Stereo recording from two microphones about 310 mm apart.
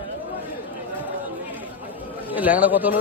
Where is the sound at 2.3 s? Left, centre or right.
Centre.